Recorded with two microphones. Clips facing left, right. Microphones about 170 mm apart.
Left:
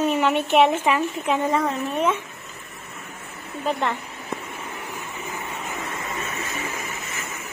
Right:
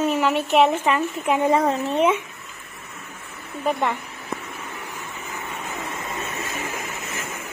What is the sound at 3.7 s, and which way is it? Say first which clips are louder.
Speech: right 2 dB; 15° right (ahead or behind).